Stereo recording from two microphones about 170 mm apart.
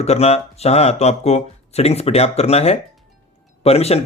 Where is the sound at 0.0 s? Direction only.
40° left (ahead or behind).